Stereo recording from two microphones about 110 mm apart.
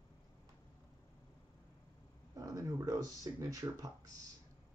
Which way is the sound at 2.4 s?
35° right (ahead or behind).